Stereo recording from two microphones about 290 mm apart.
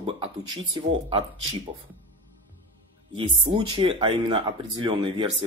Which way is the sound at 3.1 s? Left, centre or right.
Centre.